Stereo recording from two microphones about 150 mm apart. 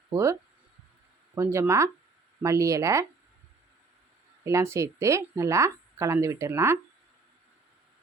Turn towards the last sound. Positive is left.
turn(degrees=-20)  # may be behind; listen again after turning